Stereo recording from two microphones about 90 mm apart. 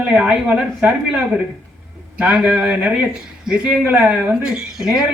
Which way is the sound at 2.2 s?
10° right (ahead or behind).